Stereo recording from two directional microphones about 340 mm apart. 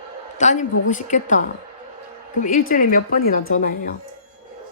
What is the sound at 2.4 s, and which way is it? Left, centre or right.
A woman's voice, left.